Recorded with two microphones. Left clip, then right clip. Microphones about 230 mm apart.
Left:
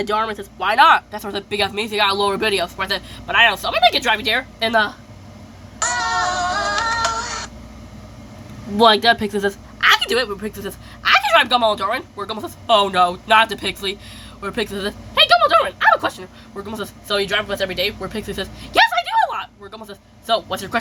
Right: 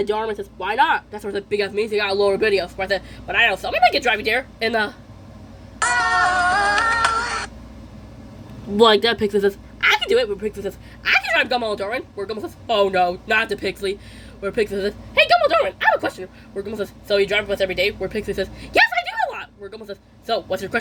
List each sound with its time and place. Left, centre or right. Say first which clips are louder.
0.0 s speech: left 2 dB; centre
5.8 s music: right 2 dB; right
8.8 s speech: left 2 dB; centre
9.9 s speech: even; centre
15.3 s a sound: left 3 dB; centre
16.0 s speech: left 2 dB; centre